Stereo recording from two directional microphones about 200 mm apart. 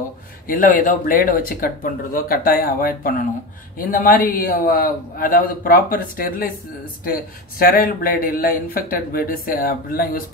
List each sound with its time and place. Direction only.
0.5 s a man's voice: 40° left (ahead or behind)
7.5 s a man's voice: 45° left (ahead or behind)